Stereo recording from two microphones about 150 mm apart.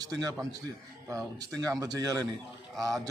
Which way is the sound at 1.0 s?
20° right (ahead or behind).